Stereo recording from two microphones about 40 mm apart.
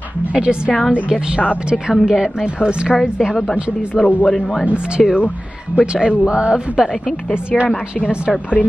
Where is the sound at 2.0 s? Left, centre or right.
Centre.